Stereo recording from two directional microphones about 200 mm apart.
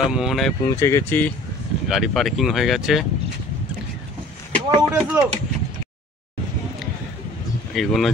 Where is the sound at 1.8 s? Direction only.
Centre (ahead or behind).